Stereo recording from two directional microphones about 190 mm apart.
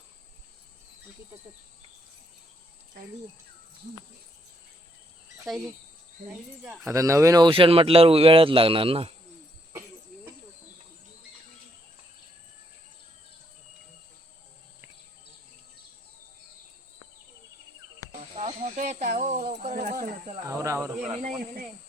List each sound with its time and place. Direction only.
6.8 s speech: 15° right (ahead or behind)
18.3 s snake: 35° right (ahead or behind)
19.7 s snake: 50° right (ahead or behind)
20.5 s snake: 15° right (ahead or behind)
21.0 s speech: 35° right (ahead or behind)